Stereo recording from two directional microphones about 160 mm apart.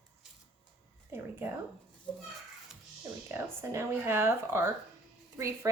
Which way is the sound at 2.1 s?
5° left (ahead or behind).